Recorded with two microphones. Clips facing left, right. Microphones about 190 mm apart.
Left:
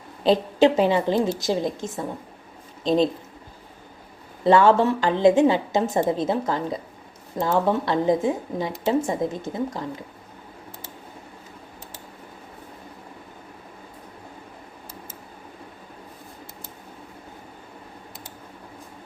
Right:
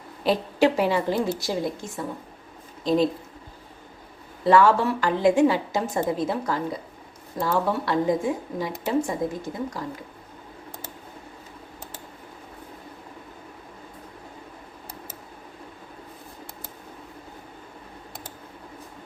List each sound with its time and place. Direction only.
0.2 s speech: 25° left (ahead or behind)
4.4 s speech: 25° left (ahead or behind)